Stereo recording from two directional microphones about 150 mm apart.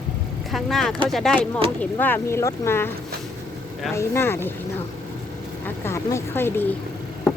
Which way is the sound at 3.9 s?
15° left (ahead or behind).